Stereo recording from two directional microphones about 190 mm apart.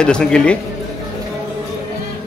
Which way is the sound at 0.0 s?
5° left (ahead or behind).